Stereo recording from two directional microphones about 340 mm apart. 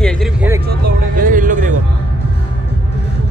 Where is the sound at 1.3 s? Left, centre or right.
Right.